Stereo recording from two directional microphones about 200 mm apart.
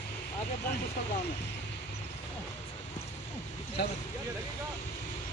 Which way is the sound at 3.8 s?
55° left (ahead or behind).